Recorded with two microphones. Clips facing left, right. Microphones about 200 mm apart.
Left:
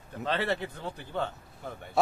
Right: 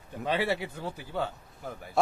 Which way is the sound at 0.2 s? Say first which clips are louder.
Right 1 dB; 10° right (ahead or behind).